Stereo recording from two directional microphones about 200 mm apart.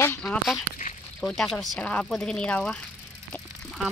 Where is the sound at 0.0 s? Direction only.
10° left (ahead or behind).